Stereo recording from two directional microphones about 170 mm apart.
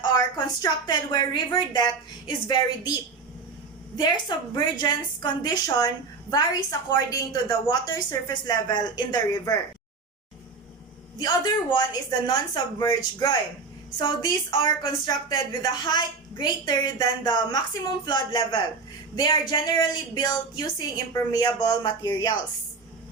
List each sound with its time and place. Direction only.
0.0 s a woman's voice: 25° left (ahead or behind)
4.0 s a woman's voice: 25° left (ahead or behind)
11.2 s a woman's voice: 25° left (ahead or behind)